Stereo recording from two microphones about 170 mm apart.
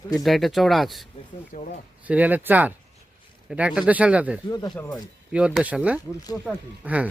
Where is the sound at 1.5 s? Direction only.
50° left (ahead or behind).